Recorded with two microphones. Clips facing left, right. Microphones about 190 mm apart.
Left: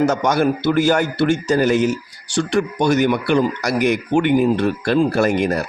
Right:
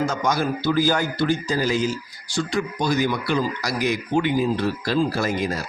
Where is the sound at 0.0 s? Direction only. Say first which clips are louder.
Left 6 dB; 70° left (ahead or behind).